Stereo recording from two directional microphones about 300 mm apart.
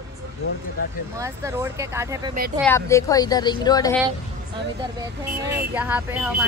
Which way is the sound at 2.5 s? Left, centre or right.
Centre.